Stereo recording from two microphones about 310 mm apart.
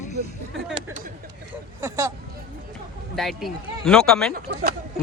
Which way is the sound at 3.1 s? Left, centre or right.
Centre.